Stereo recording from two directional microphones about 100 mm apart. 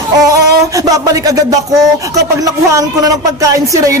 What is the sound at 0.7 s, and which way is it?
A woman's voice, 35° right (ahead or behind).